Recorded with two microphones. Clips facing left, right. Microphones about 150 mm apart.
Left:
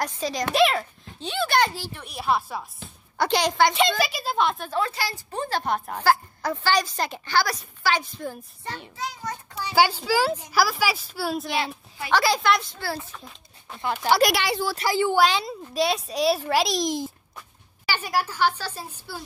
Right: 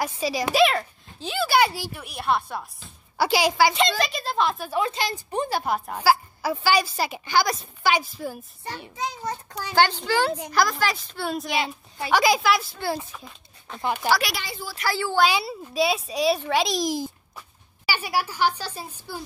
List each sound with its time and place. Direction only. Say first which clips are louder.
0.0 s a child's voice: right 1 dB; 5° right (ahead or behind)
4.7 s a woman's voice: right 1 dB; 20° right (ahead or behind)
5.6 s a woman's voice: even; 5° right (ahead or behind)
8.0 s a woman's voice: right 1 dB; 5° right (ahead or behind)
9.8 s a child's voice: even; 5° left (ahead or behind)
12.1 s a woman's voice: right 1 dB; 10° right (ahead or behind)
12.8 s a woman's voice: right 3 dB; 15° right (ahead or behind)
14.3 s a woman's voice: left 9 dB; 75° left (ahead or behind)
14.8 s speech: left 2 dB; 20° left (ahead or behind)
15.2 s a child's voice: even; 5° right (ahead or behind)